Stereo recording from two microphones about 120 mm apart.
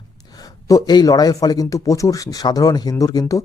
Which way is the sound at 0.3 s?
30° left (ahead or behind).